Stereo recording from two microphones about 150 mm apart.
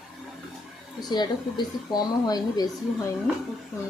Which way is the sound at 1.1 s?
30° left (ahead or behind).